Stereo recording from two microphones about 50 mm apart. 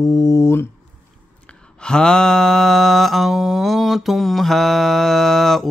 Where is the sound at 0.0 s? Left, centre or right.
Left.